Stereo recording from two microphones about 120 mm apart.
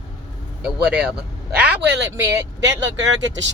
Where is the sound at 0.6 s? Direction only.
10° right (ahead or behind).